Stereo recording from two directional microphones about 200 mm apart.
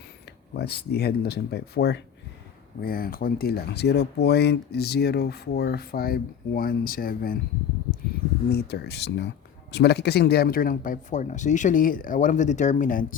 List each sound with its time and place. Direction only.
0.5 s speech: 55° left (ahead or behind)
8.4 s speech: 55° left (ahead or behind)